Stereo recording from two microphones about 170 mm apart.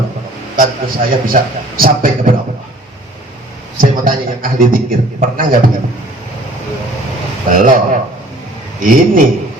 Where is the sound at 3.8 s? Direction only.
55° right (ahead or behind).